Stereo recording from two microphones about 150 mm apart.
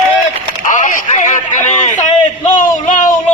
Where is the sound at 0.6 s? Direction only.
55° left (ahead or behind).